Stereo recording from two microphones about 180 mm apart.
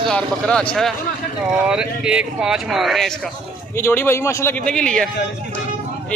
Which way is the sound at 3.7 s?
15° left (ahead or behind).